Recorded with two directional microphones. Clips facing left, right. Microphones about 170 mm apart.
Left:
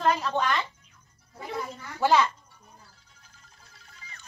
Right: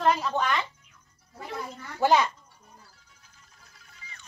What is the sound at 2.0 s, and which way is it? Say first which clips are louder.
Speech: even; 20° right (ahead or behind).